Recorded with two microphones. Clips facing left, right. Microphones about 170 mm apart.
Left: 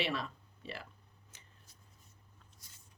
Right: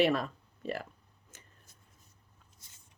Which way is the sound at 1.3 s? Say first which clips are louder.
Right 6 dB; 50° right (ahead or behind).